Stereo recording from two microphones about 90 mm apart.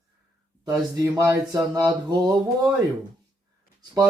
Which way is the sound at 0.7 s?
40° right (ahead or behind).